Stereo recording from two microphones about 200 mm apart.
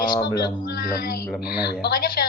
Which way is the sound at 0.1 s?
20° left (ahead or behind).